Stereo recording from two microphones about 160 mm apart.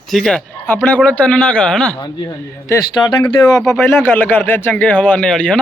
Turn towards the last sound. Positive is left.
turn(degrees=5)  # may be behind; listen again after turning